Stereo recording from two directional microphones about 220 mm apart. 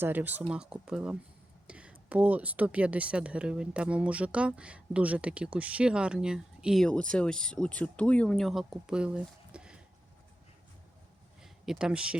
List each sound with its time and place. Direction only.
0.0 s speech: 10° right (ahead or behind)
11.4 s speech: centre (ahead or behind)